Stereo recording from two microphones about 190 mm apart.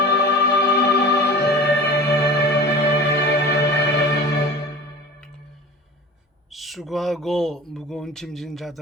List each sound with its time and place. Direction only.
0.0 s music: 60° left (ahead or behind)
6.5 s speech: centre (ahead or behind)